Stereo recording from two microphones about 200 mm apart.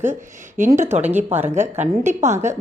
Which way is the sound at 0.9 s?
35° right (ahead or behind).